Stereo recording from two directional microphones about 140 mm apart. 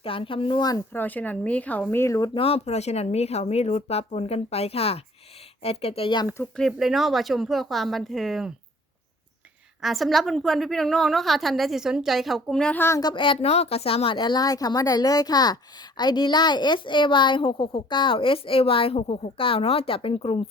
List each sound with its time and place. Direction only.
0.0 s a woman's voice: 40° left (ahead or behind)
0.9 s speech: 10° left (ahead or behind)
2.3 s speech: 45° left (ahead or behind)
6.6 s a woman's voice: centre (ahead or behind)
9.8 s a woman's voice: centre (ahead or behind)
13.0 s a woman's voice: 35° left (ahead or behind)